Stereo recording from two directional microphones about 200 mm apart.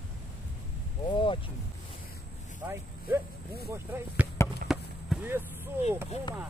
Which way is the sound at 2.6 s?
10° right (ahead or behind).